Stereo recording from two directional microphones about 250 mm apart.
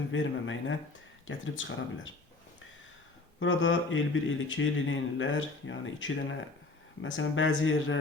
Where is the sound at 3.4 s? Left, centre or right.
Left.